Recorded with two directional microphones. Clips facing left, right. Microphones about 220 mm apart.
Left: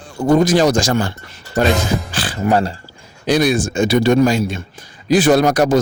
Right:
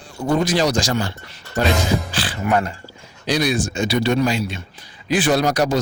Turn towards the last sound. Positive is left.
turn(degrees=50)  # may be behind; listen again after turning